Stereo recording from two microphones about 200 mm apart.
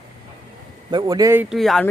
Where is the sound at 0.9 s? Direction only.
20° right (ahead or behind).